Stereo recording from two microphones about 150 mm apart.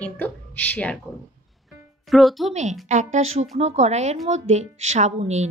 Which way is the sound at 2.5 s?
50° right (ahead or behind).